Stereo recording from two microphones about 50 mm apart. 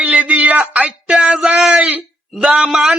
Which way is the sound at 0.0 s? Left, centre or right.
Right.